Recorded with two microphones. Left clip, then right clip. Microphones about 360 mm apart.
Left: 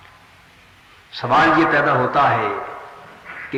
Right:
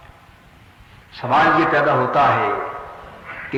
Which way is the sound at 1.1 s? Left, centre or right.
Centre.